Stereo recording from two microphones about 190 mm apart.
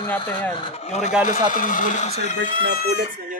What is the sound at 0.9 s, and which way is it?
Speech, 35° left (ahead or behind).